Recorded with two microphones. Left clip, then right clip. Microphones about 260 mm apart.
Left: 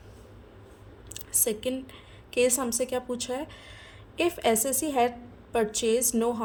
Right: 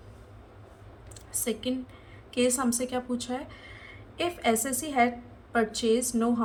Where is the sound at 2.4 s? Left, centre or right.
Left.